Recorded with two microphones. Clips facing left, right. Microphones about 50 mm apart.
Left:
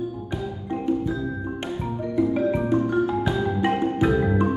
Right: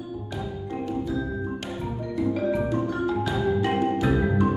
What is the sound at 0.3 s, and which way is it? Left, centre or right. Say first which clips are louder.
Music: left 3 dB; left.